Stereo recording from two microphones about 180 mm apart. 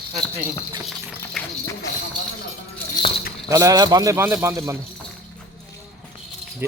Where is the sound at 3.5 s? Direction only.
20° right (ahead or behind).